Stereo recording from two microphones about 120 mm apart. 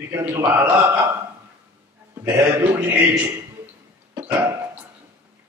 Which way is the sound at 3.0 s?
15° right (ahead or behind).